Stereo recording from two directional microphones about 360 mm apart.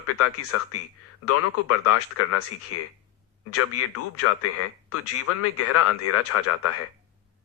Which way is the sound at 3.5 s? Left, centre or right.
Left.